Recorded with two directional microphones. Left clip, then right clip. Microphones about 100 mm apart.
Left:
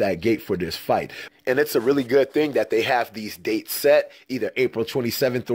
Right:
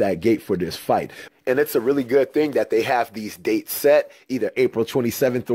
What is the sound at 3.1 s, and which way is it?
Speech, 40° right (ahead or behind).